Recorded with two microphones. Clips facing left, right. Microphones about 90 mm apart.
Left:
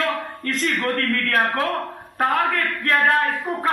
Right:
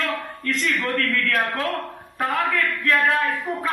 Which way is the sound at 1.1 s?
40° left (ahead or behind).